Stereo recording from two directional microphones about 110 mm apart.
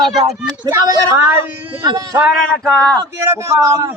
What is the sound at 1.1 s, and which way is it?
Speech, 20° right (ahead or behind).